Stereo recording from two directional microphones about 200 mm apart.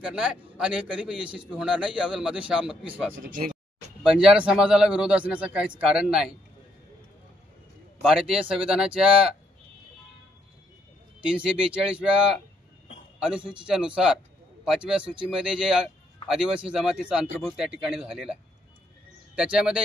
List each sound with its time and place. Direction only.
0.0 s a man's voice: 5° right (ahead or behind)
3.3 s a sound: 40° right (ahead or behind)
4.1 s a man's voice: 5° right (ahead or behind)
8.0 s a man's voice: 5° right (ahead or behind)
11.2 s a man's voice: 5° right (ahead or behind)
13.6 s a man's voice: 5° right (ahead or behind)